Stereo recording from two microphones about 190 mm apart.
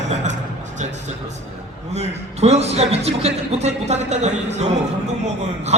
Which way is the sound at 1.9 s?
35° right (ahead or behind).